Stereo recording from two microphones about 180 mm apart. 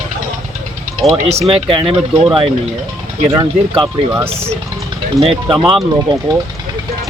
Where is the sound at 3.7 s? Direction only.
10° right (ahead or behind).